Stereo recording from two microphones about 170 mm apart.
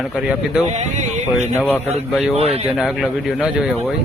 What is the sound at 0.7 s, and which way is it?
Speech, 45° right (ahead or behind).